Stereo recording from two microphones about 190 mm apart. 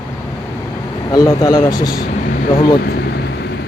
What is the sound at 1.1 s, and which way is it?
Speech, 20° left (ahead or behind).